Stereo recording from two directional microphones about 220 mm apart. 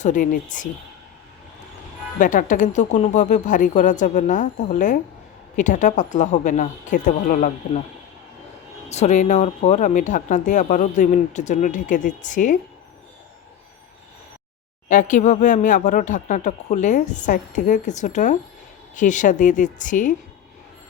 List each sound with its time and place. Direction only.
0.0 s speech: 35° left (ahead or behind)
2.1 s speech: 35° left (ahead or behind)
8.9 s speech: 30° left (ahead or behind)
14.8 s speech: 35° left (ahead or behind)